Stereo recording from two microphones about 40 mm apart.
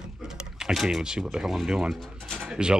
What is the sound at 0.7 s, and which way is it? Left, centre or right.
Speech, centre.